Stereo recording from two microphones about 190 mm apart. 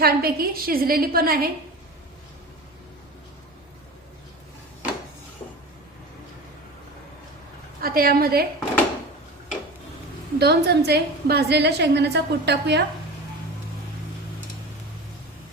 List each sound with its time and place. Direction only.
0.0 s a woman's voice: 55° right (ahead or behind)
7.8 s a woman's voice: 50° right (ahead or behind)
10.3 s a woman's voice: 60° right (ahead or behind)